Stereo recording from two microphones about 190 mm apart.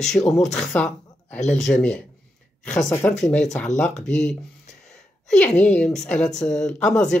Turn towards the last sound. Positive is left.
turn(degrees=5)  # may be behind; listen again after turning